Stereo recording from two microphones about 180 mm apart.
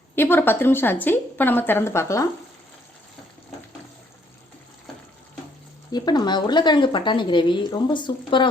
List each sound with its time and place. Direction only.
0.2 s a woman's voice: 10° left (ahead or behind)
5.9 s a woman's voice: 25° left (ahead or behind)